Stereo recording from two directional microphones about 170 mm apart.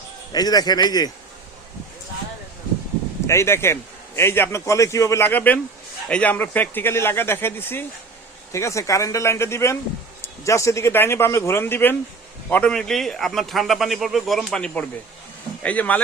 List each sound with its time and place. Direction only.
0.3 s a man's voice: 25° left (ahead or behind)
3.2 s a man's voice: 15° left (ahead or behind)